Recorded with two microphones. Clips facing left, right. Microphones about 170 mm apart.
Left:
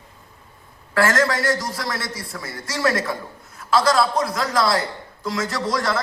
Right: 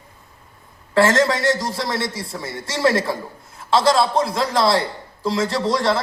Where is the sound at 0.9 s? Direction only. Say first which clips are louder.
Right 3 dB; 25° right (ahead or behind).